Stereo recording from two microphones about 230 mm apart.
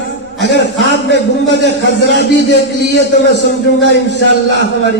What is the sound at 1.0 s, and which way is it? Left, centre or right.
A man's voice, left.